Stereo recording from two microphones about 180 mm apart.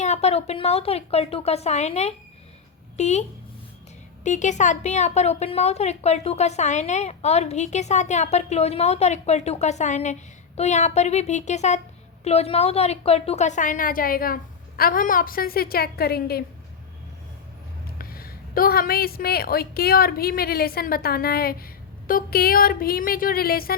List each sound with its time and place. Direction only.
0.0 s a woman's voice: 40° left (ahead or behind); by 16.4 s 60° left (ahead or behind)
17.9 s a woman's voice: 55° left (ahead or behind)